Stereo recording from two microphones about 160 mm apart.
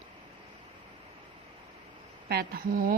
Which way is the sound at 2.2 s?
75° right (ahead or behind).